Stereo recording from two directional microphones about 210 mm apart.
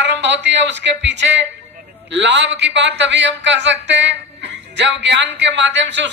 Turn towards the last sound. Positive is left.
turn(degrees=-55)  # may be behind; listen again after turning